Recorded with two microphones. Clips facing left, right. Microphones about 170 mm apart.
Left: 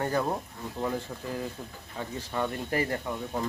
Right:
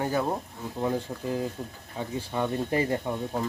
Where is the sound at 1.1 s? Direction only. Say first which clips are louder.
Right 4 dB; 20° right (ahead or behind).